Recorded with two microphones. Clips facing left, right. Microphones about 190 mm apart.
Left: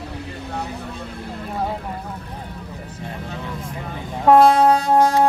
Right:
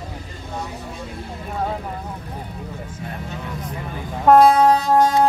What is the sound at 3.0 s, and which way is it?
Music, 30° left (ahead or behind).